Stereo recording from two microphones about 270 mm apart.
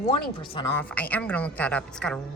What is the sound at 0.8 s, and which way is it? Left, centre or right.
A woman's voice, centre.